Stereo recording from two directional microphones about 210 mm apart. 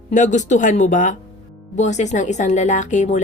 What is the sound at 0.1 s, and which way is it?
A woman's voice, 35° left (ahead or behind).